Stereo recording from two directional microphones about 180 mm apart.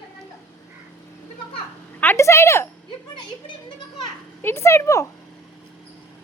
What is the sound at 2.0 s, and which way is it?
Speech, 15° left (ahead or behind).